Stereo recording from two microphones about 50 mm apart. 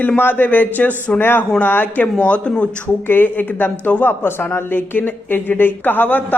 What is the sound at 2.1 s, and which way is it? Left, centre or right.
Speech, left.